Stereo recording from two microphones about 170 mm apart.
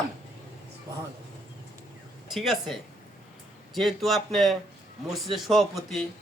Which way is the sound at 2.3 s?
Centre (ahead or behind).